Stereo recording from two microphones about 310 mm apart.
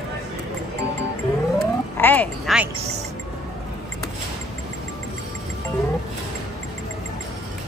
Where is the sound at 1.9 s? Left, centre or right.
Centre.